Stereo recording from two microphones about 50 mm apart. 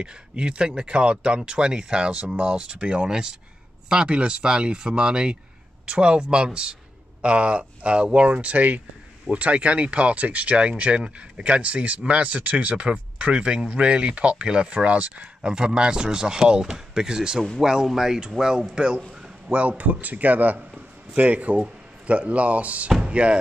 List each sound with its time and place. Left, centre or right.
0.0 s speech: centre
19.8 s speech: right
20.5 s a sound: centre
21.2 s speech: right